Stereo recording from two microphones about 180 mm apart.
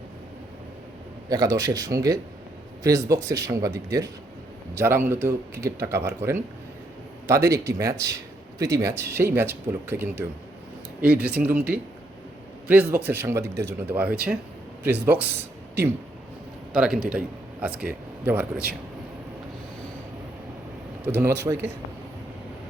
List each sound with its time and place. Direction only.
1.3 s a man's voice: 20° right (ahead or behind)
21.0 s speech: 10° right (ahead or behind)